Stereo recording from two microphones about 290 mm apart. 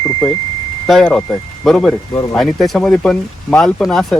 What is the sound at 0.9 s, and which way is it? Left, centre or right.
Speech, centre.